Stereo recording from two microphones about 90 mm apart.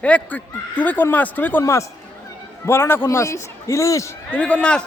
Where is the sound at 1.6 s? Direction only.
35° left (ahead or behind).